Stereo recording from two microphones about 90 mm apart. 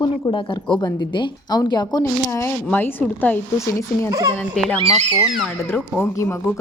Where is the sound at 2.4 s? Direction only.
25° left (ahead or behind).